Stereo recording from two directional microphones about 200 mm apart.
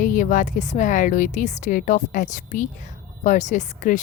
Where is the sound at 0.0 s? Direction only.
40° left (ahead or behind).